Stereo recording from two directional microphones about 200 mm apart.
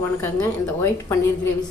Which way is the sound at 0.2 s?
15° left (ahead or behind).